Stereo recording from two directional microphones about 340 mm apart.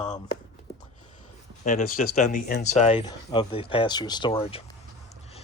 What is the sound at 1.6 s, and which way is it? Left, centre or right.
Speech, left.